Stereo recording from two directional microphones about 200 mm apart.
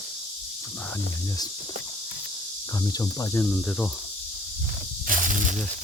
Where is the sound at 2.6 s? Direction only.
20° left (ahead or behind).